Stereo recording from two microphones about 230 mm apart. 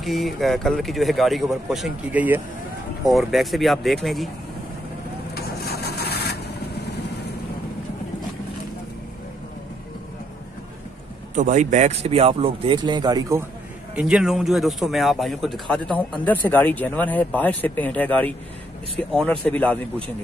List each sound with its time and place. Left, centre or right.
0.0 s speech: centre
5.3 s vehicle: left
11.3 s speech: right; by 13.5 s centre
13.9 s speech: centre